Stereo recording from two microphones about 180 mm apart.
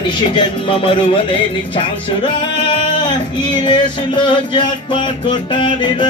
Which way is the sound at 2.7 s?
25° left (ahead or behind).